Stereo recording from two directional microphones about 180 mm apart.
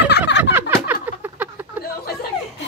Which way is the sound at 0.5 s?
10° right (ahead or behind).